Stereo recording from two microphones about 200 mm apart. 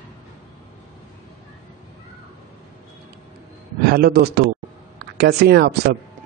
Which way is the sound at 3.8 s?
50° right (ahead or behind).